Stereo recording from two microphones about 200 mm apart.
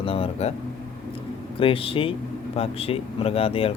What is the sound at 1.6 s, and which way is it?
Speech, 25° left (ahead or behind).